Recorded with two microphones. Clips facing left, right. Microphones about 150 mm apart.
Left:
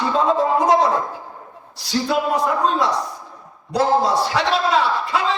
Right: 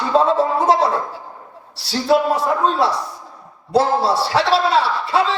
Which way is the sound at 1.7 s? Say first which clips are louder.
Right 3 dB; 30° right (ahead or behind).